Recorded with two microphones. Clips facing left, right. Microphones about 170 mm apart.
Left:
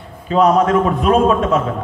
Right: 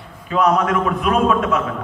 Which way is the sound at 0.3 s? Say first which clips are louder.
Left 4 dB; 30° left (ahead or behind).